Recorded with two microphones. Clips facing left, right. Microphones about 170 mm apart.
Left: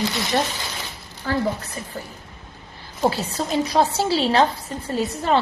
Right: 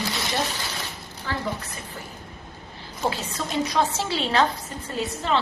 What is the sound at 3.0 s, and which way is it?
A woman's voice, 35° left (ahead or behind).